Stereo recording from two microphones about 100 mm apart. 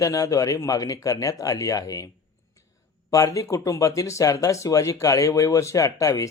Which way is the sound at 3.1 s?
35° left (ahead or behind).